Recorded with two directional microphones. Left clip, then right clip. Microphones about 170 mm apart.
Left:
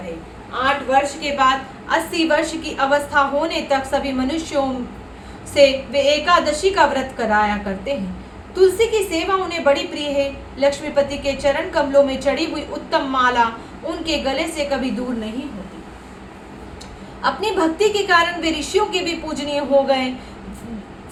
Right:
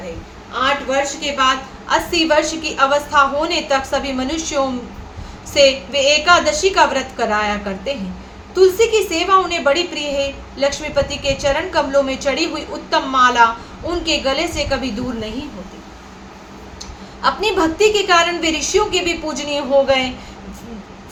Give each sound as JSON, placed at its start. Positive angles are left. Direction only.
{"t": 0.6, "sound": "a woman's voice", "side_deg": -25}
{"t": 17.2, "sound": "a woman's voice", "side_deg": -25}